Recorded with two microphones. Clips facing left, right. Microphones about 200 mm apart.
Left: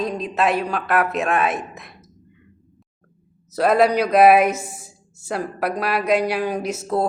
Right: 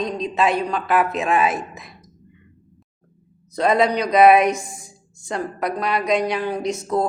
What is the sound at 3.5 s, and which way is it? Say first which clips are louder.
Speech: left 2 dB; 5° left (ahead or behind).